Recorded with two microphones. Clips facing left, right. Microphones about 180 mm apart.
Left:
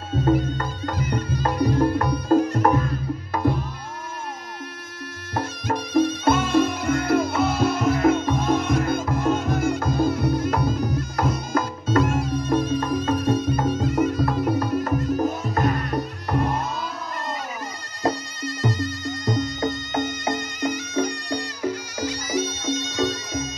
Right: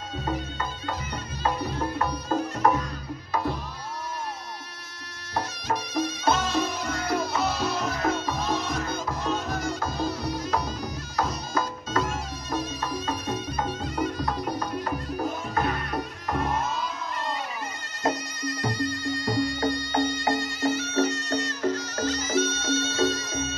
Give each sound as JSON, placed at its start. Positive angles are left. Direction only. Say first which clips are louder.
{"t": 1.3, "sound": "music", "louder": "left 6 dB", "side_deg": 10}
{"t": 2.3, "sound": "music", "louder": "left 6 dB", "side_deg": 50}
{"t": 5.3, "sound": "music", "louder": "left 3 dB", "side_deg": 50}
{"t": 14.0, "sound": "music", "louder": "left 7 dB", "side_deg": 5}
{"t": 15.0, "sound": "music", "louder": "left 7 dB", "side_deg": 45}
{"t": 18.0, "sound": "music", "louder": "left 3 dB", "side_deg": 25}